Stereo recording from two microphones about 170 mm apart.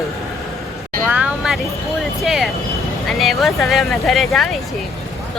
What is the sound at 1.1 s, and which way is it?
Vehicle, 5° right (ahead or behind).